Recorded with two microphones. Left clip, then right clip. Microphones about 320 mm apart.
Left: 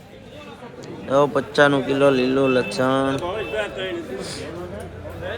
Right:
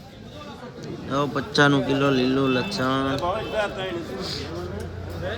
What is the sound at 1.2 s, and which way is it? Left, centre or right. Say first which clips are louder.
Speech: left 6 dB; left.